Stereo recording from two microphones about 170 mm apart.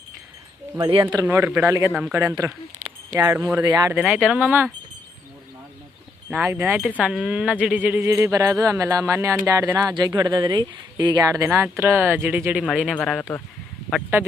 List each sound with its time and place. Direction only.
0.8 s speech: 30° right (ahead or behind)
1.1 s speech: 15° right (ahead or behind)
1.9 s speech: 5° right (ahead or behind)
2.4 s speech: 15° right (ahead or behind)
3.9 s speech: 10° right (ahead or behind)
6.3 s speech: 15° right (ahead or behind); by 13.4 s 5° left (ahead or behind)